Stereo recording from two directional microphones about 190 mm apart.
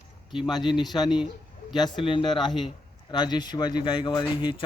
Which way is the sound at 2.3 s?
Centre (ahead or behind).